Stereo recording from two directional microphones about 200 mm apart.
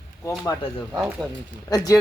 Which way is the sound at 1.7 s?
20° left (ahead or behind).